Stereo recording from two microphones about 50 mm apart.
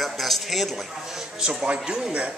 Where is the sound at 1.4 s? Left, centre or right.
Centre.